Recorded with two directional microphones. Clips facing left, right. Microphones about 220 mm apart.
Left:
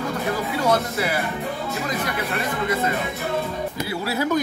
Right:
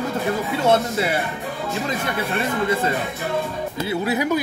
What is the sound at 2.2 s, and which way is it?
Speech, 30° right (ahead or behind).